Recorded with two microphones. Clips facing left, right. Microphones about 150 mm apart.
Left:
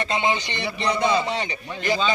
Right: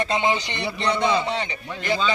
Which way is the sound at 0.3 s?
5° left (ahead or behind).